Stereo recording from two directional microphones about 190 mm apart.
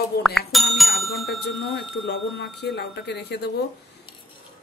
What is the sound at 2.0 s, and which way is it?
Speech, 65° left (ahead or behind).